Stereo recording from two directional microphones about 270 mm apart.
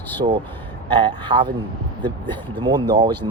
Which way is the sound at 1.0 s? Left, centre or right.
Centre.